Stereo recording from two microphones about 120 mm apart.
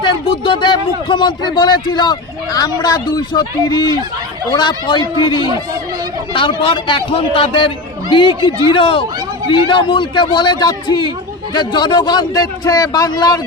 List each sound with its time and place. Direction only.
0.0 s speech: 45° left (ahead or behind)